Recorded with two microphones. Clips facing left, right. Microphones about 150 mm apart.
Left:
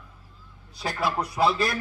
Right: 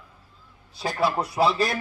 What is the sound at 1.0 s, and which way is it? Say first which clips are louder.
Speech: right 2 dB; 35° right (ahead or behind).